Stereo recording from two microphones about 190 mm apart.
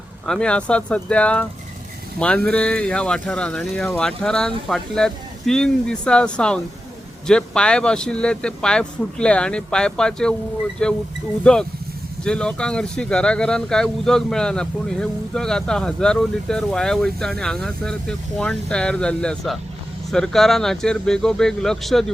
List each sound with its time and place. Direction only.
0.3 s speech: 5° left (ahead or behind)